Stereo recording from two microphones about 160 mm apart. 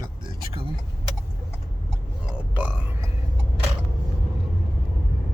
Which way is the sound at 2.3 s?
10° right (ahead or behind).